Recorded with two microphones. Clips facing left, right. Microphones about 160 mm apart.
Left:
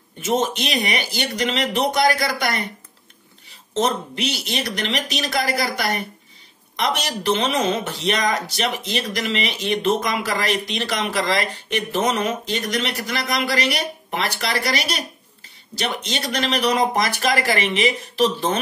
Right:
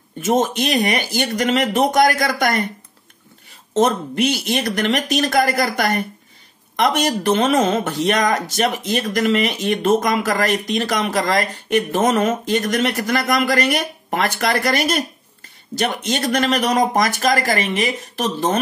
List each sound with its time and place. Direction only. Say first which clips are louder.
0.2 s speech: right 4 dB; 50° right (ahead or behind)
3.7 s speech: right 5 dB; 50° right (ahead or behind)